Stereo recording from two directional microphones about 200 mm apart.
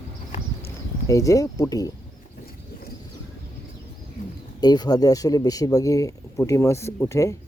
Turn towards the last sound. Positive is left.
turn(degrees=15)  # may be behind; listen again after turning